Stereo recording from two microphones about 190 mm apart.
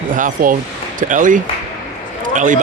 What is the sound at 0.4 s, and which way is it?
Speech, 50° right (ahead or behind).